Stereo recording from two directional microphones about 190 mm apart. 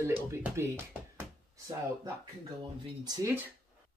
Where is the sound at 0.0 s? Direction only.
15° right (ahead or behind).